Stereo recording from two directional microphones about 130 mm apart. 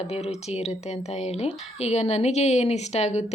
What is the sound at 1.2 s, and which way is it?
Speech, 55° left (ahead or behind).